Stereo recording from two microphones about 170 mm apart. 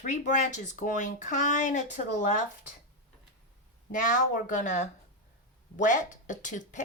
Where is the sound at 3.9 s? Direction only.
50° left (ahead or behind).